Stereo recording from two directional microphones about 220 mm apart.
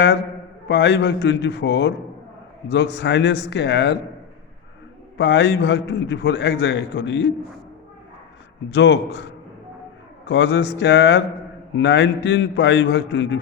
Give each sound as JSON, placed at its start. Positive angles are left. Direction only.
{"t": 0.7, "sound": "a man's voice", "side_deg": 50}
{"t": 5.1, "sound": "a man's voice", "side_deg": 55}
{"t": 8.7, "sound": "a man's voice", "side_deg": 55}